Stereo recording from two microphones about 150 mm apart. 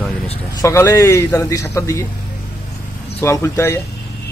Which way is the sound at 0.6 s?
20° left (ahead or behind).